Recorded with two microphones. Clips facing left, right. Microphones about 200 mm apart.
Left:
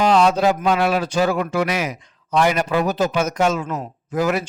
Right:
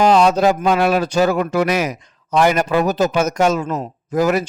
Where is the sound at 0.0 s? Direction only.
45° right (ahead or behind).